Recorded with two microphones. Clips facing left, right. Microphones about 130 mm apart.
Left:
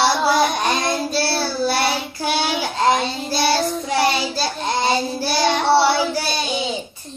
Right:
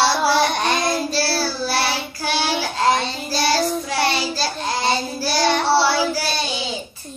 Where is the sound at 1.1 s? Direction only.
20° left (ahead or behind).